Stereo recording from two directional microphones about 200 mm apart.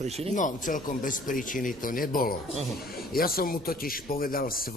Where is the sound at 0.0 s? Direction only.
30° right (ahead or behind).